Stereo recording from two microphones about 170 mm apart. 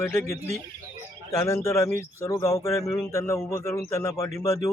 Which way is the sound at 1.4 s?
15° left (ahead or behind).